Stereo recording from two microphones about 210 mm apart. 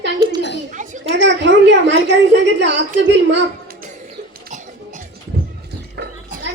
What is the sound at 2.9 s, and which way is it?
Child singing, 60° right (ahead or behind).